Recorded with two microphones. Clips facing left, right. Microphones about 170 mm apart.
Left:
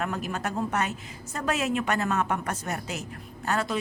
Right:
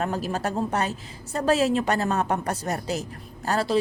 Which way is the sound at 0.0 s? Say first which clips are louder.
Right 4 dB; 30° right (ahead or behind).